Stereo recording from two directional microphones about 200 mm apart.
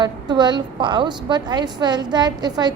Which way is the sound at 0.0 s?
20° right (ahead or behind).